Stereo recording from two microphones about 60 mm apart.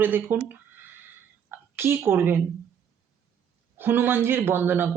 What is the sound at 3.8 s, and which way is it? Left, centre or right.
Speech, right.